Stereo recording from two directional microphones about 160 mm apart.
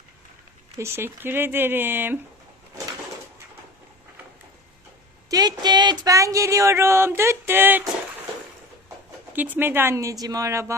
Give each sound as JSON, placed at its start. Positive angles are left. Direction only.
{"t": 0.8, "sound": "speech", "side_deg": -15}
{"t": 5.3, "sound": "a sound", "side_deg": -25}
{"t": 9.3, "sound": "speech", "side_deg": -10}